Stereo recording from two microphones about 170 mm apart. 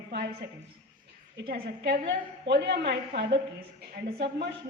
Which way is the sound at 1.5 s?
60° right (ahead or behind).